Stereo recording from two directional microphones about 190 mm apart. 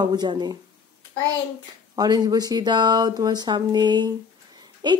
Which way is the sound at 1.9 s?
20° right (ahead or behind).